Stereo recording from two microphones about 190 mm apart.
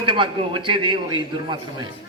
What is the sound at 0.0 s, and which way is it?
A man's voice, 25° right (ahead or behind).